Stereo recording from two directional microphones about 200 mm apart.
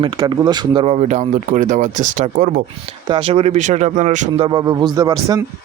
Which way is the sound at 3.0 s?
25° right (ahead or behind).